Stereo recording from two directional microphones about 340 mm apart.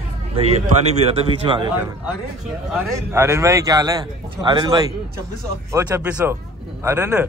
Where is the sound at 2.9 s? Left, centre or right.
Centre.